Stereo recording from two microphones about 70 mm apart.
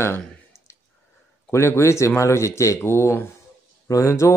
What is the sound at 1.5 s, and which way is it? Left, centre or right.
Speech, left.